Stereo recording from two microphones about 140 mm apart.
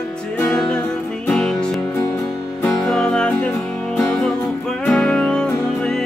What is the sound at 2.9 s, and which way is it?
Music, 5° left (ahead or behind).